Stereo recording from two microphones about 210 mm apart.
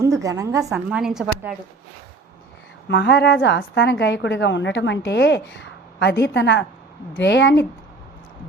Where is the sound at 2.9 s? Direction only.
55° left (ahead or behind).